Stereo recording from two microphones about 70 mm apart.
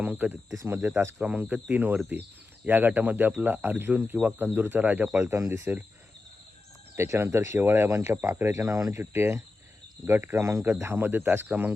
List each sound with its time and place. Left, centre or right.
0.0 s speech: right
0.5 s speech: right
1.2 s speech: right
5.2 s speech: right
6.9 s speech: right
8.6 s speech: right
9.0 s speech: right
10.7 s speech: right